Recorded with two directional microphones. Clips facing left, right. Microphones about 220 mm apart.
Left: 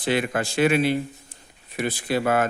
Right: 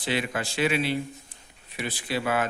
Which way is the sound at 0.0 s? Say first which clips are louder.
Left 5 dB; 50° left (ahead or behind).